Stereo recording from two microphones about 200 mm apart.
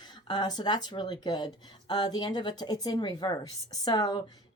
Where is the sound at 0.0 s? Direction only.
20° left (ahead or behind).